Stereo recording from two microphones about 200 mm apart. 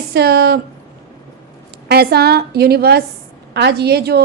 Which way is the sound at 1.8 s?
55° right (ahead or behind).